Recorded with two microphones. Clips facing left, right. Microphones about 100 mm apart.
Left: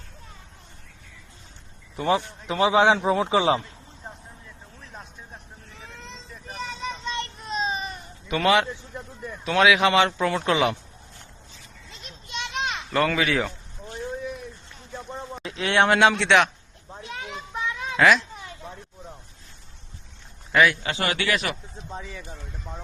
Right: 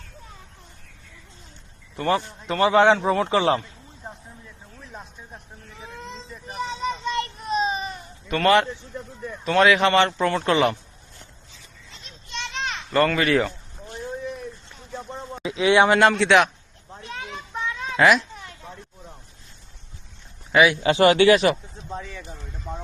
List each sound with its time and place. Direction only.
2.0 s a man's voice: 10° left (ahead or behind)
4.8 s music: 5° right (ahead or behind)
5.8 s vehicle: 5° right (ahead or behind)
6.7 s child singing: 10° right (ahead or behind)
8.3 s speech: 5° left (ahead or behind)
12.3 s children playing: 15° left (ahead or behind)
12.9 s speech: centre (ahead or behind)
15.4 s speech: 5° right (ahead or behind)
16.9 s a sound: 5° left (ahead or behind)
20.5 s a man's voice: 10° right (ahead or behind)
20.8 s speech: 30° right (ahead or behind)
21.8 s speech: centre (ahead or behind)